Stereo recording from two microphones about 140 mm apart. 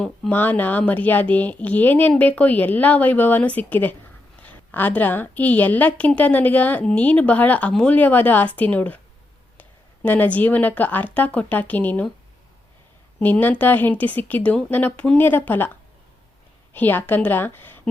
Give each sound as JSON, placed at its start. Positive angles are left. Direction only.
{"t": 0.0, "sound": "a woman's voice", "side_deg": 10}
{"t": 13.1, "sound": "a woman's voice", "side_deg": 10}
{"t": 16.7, "sound": "a woman's voice", "side_deg": 15}